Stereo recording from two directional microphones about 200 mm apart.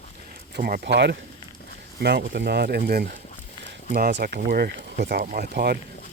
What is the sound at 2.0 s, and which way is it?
Speech, 55° right (ahead or behind).